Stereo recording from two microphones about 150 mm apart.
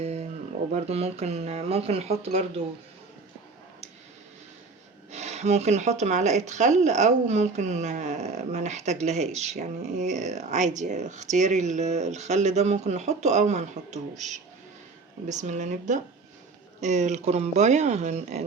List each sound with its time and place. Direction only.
0.0 s a sound: 45° right (ahead or behind)
0.7 s speech: 45° right (ahead or behind)
5.1 s speech: 50° right (ahead or behind)